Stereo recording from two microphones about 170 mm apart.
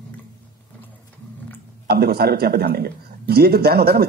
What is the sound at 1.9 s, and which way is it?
A man's voice, 65° right (ahead or behind).